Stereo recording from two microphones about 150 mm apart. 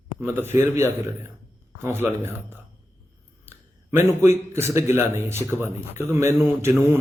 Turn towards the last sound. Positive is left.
turn(degrees=-15)  # may be behind; listen again after turning